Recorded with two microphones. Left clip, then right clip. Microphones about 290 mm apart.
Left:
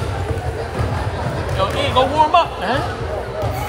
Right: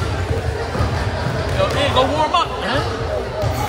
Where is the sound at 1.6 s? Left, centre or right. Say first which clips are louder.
Even; left.